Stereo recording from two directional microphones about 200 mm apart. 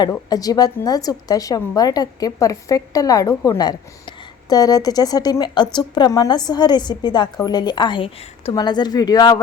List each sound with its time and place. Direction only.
0.0 s a woman's voice: 20° left (ahead or behind)